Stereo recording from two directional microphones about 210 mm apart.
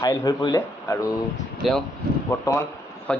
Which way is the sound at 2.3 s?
10° left (ahead or behind).